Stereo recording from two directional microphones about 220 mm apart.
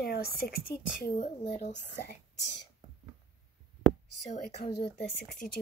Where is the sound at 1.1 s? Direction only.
30° left (ahead or behind).